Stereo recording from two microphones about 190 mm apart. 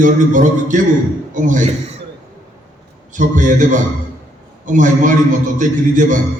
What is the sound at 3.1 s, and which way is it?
A man's voice, 40° right (ahead or behind).